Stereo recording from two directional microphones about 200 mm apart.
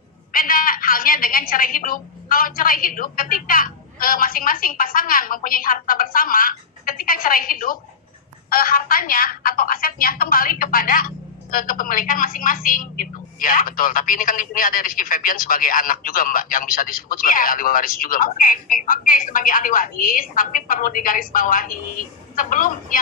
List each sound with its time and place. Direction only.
0.3 s a woman's voice: 45° left (ahead or behind)